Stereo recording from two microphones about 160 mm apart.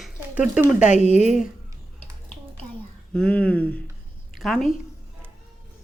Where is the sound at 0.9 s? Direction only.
45° left (ahead or behind).